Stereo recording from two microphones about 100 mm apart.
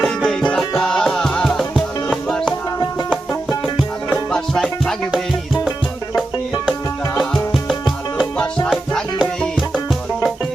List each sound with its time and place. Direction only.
0.0 s music: centre (ahead or behind)
2.7 s music: 40° left (ahead or behind)
4.3 s music: 5° left (ahead or behind)
7.2 s music: centre (ahead or behind)
9.6 s music: centre (ahead or behind)